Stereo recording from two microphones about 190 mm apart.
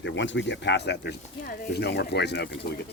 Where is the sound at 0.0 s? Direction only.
75° left (ahead or behind).